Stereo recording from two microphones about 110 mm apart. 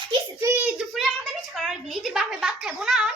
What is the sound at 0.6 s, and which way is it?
A woman's voice, 5° right (ahead or behind).